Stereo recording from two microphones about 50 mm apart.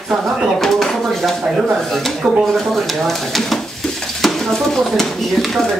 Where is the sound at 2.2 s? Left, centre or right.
Centre.